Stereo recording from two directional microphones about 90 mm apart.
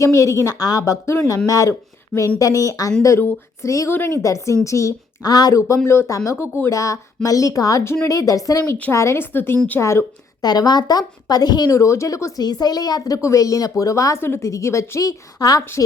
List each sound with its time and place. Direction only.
0.0 s speech: 35° left (ahead or behind)
5.5 s speech: 35° left (ahead or behind)
10.4 s speech: 50° left (ahead or behind)